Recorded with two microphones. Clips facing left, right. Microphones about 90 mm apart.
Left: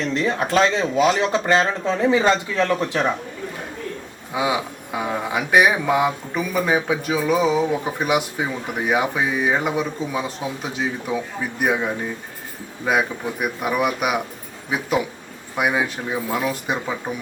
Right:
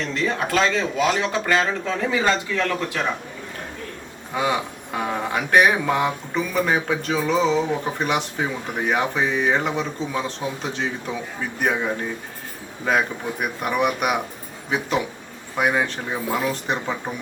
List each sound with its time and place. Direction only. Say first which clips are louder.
0.1 s speech: left 2 dB; 20° left (ahead or behind)
4.4 s speech: left 1 dB; 10° left (ahead or behind)